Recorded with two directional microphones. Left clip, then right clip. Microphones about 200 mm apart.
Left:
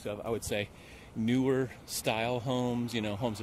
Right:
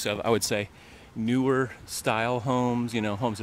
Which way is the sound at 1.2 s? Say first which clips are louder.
Right 4 dB; 15° right (ahead or behind).